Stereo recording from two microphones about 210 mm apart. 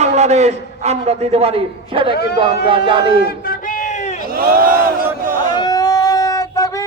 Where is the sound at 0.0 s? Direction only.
30° right (ahead or behind).